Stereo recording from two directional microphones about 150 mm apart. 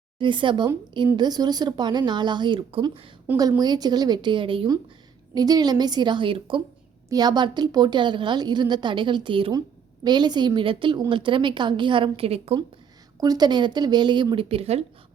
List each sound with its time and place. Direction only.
0.2 s a woman's voice: 35° right (ahead or behind)
3.3 s a woman's voice: 10° right (ahead or behind)
3.6 s a woman's voice: 25° right (ahead or behind)
13.1 s speech: 25° right (ahead or behind); by 14.8 s 45° right (ahead or behind)